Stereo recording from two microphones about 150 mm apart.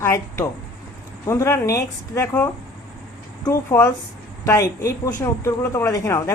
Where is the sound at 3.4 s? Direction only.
20° left (ahead or behind).